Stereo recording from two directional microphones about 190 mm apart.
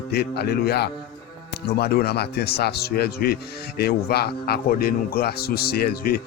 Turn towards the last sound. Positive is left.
turn(degrees=55)  # may be behind; listen again after turning